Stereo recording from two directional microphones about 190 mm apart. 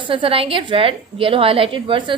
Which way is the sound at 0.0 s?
25° right (ahead or behind).